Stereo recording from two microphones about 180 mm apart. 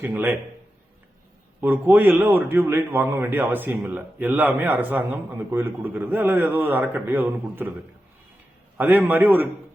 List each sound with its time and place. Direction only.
0.0 s a man's voice: 10° right (ahead or behind)
1.6 s a man's voice: 10° right (ahead or behind)
8.8 s a man's voice: 10° right (ahead or behind)